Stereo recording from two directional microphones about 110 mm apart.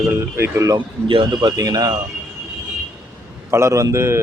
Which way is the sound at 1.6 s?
35° right (ahead or behind).